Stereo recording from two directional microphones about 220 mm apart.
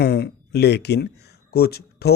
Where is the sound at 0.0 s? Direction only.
45° left (ahead or behind).